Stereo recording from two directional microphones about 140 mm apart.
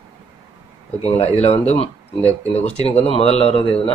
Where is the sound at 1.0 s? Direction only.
45° left (ahead or behind).